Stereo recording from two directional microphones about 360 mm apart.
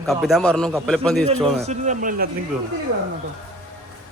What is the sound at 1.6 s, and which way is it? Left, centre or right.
Speech, centre.